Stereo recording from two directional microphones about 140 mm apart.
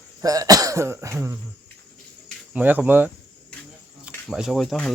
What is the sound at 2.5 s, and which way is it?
Speech, 10° right (ahead or behind).